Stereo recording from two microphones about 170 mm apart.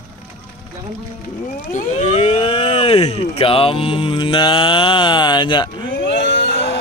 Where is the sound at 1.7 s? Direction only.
45° left (ahead or behind); by 5.9 s 30° left (ahead or behind).